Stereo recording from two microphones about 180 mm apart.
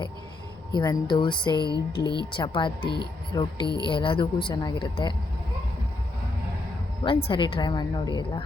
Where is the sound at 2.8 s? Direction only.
65° left (ahead or behind).